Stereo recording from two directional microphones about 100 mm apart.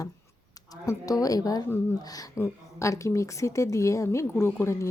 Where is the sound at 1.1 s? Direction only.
35° left (ahead or behind).